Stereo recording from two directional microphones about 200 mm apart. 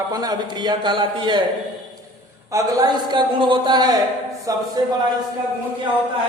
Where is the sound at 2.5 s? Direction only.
15° right (ahead or behind).